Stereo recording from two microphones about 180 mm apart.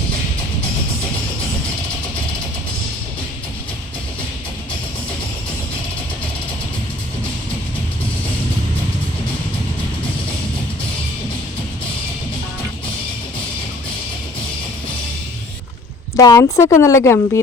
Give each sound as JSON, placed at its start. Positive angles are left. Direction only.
{"t": 16.1, "sound": "speech", "side_deg": 20}